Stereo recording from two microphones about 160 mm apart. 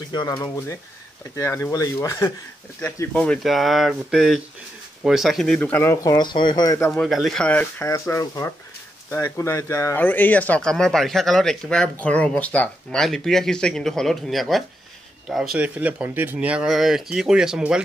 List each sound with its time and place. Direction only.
0.1 s speech: 25° left (ahead or behind)
6.9 s speech: centre (ahead or behind)